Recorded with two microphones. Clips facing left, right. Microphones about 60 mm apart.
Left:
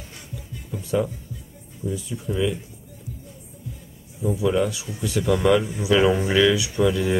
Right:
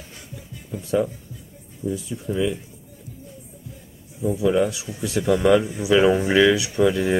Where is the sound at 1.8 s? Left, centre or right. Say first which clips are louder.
Right 2 dB; centre.